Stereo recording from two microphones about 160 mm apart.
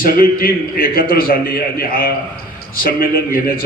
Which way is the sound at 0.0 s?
65° left (ahead or behind).